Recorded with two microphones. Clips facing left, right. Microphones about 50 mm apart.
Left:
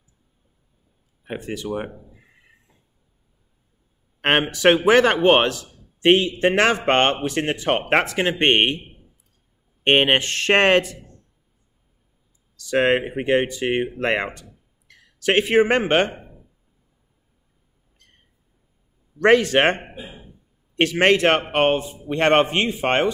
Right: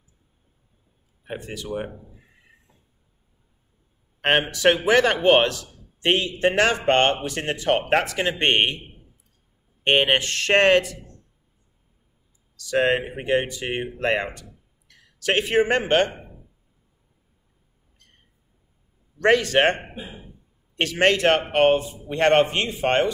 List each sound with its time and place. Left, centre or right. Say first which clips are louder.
1.2 s speech: left 4 dB; left
4.2 s a man's voice: left 2 dB; left
9.8 s speech: left 2 dB; left
12.5 s a man's voice: left 2 dB; left
19.2 s a man's voice: left 2 dB; left